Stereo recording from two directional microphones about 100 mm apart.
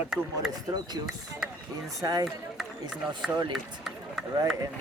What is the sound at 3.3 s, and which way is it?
Speech, 45° right (ahead or behind).